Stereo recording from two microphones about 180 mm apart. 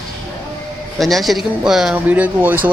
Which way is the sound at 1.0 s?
Centre (ahead or behind).